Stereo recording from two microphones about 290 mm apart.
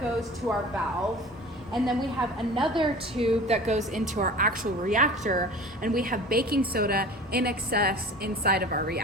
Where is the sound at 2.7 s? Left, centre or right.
Centre.